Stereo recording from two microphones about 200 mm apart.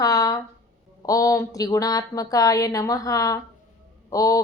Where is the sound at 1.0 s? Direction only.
15° left (ahead or behind).